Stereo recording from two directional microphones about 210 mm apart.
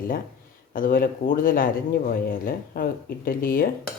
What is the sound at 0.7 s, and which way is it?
Speech, 40° left (ahead or behind).